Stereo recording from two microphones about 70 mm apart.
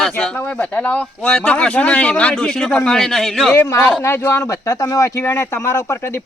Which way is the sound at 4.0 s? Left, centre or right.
Left.